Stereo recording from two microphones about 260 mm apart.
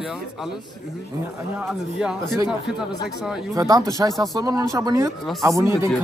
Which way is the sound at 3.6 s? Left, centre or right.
Centre.